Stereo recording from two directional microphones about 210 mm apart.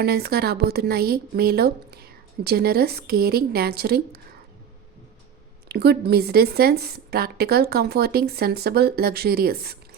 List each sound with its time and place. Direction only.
0.0 s a woman's voice: 50° right (ahead or behind)
5.6 s a woman's voice: 50° right (ahead or behind)